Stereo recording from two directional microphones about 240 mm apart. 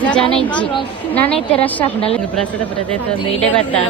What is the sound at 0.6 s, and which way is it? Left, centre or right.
Speech, left.